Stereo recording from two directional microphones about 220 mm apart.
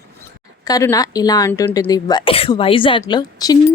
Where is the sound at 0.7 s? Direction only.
15° left (ahead or behind).